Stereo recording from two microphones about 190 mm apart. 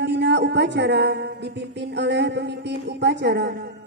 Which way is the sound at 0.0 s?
65° right (ahead or behind).